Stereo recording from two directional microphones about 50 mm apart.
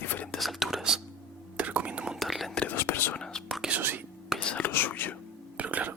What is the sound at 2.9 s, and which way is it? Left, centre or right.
Whispering, left.